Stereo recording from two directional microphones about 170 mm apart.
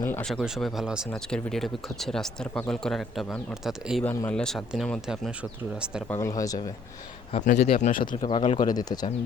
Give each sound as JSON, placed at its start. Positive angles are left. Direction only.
{"t": 0.0, "sound": "speech", "side_deg": 15}
{"t": 0.3, "sound": "speech", "side_deg": 0}
{"t": 4.0, "sound": "speech", "side_deg": 15}
{"t": 4.3, "sound": "speech", "side_deg": 5}
{"t": 6.1, "sound": "speech", "side_deg": 15}
{"t": 7.3, "sound": "speech", "side_deg": 40}
{"t": 8.2, "sound": "speech", "side_deg": 30}